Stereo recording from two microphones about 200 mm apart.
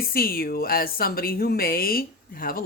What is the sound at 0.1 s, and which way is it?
Speech, 50° left (ahead or behind).